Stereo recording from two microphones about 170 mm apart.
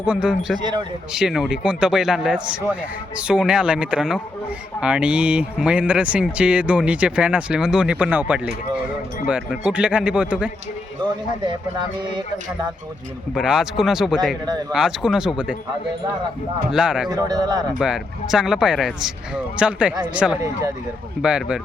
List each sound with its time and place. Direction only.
0.0 s speech: 5° right (ahead or behind)
11.4 s speech: 25° right (ahead or behind)
13.3 s speech: 5° right (ahead or behind)
16.7 s speech: 5° right (ahead or behind)
17.1 s speech: 25° right (ahead or behind)
17.7 s speech: 5° right (ahead or behind)